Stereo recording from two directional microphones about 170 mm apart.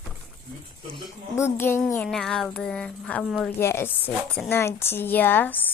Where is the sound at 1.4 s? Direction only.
15° left (ahead or behind).